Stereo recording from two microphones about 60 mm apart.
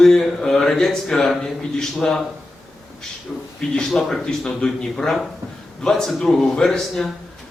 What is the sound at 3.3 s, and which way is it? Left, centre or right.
Speech, centre.